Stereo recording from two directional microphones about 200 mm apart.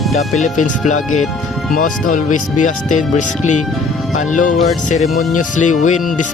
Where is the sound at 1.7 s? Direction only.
40° left (ahead or behind).